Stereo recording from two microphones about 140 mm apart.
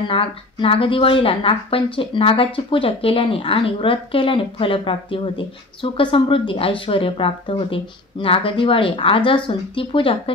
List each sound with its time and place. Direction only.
0.1 s speech: 40° left (ahead or behind)